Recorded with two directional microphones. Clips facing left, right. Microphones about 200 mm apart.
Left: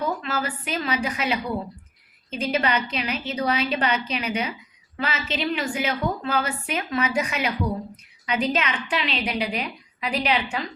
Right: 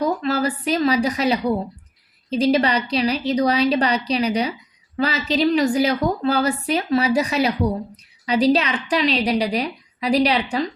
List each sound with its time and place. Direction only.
0.0 s a woman's voice: 35° right (ahead or behind)